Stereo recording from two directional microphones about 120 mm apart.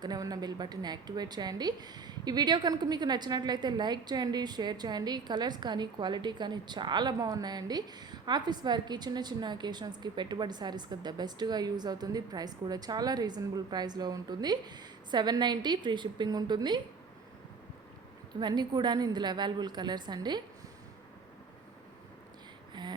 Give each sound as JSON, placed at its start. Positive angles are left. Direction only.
{"t": 0.0, "sound": "a woman's voice", "side_deg": -35}
{"t": 18.3, "sound": "a woman's voice", "side_deg": -35}
{"t": 22.7, "sound": "a sound", "side_deg": -35}